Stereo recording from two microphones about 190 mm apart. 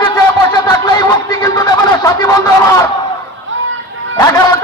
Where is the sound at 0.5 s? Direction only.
20° left (ahead or behind).